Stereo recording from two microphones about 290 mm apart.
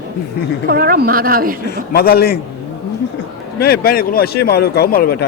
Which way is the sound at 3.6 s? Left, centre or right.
Left.